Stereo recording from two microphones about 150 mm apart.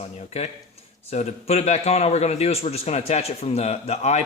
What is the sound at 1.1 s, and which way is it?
Speech, 45° left (ahead or behind).